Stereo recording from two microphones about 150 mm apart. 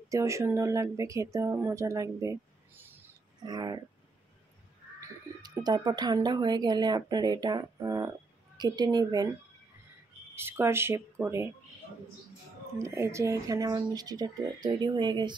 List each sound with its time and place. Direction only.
0.1 s speech: 20° right (ahead or behind)
3.4 s speech: 30° right (ahead or behind)
5.0 s speech: 25° right (ahead or behind)
10.3 s speech: 15° right (ahead or behind)
12.7 s speech: 20° right (ahead or behind)